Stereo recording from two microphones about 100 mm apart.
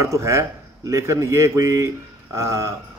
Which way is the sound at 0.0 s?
30° right (ahead or behind).